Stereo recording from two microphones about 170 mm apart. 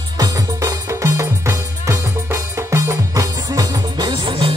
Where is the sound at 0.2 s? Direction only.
20° right (ahead or behind).